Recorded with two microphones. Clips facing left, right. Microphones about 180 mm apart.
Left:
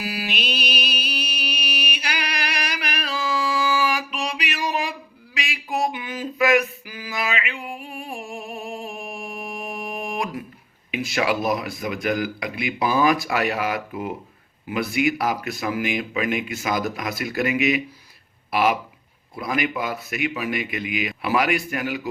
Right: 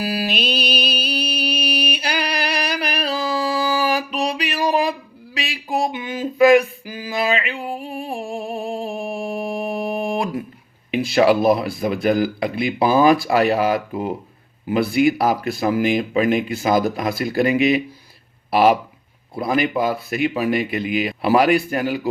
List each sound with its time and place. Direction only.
0.0 s mantra: 35° right (ahead or behind)
10.9 s speech: 30° right (ahead or behind)